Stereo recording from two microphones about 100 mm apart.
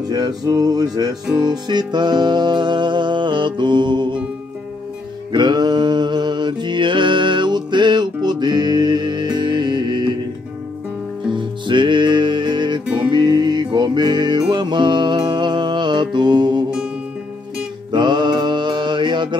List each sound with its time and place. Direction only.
0.1 s music: 40° right (ahead or behind)
5.3 s mantra: 50° right (ahead or behind)
11.3 s music: 50° right (ahead or behind)
17.9 s mantra: 50° right (ahead or behind)